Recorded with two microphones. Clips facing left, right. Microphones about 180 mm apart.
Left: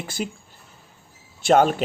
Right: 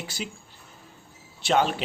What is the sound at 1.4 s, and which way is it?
Speech, 50° left (ahead or behind).